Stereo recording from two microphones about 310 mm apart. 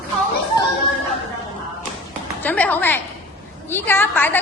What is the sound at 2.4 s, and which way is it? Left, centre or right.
A woman's voice, centre.